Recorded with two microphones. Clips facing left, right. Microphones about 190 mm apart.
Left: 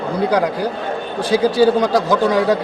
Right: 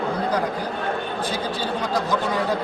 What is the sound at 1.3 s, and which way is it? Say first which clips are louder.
A man's voice: left 13 dB; 90° left.